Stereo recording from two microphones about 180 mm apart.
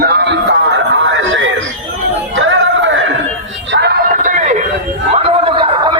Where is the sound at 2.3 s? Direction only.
90° right.